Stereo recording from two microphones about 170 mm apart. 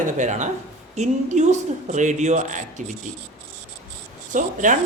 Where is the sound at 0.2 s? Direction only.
45° right (ahead or behind).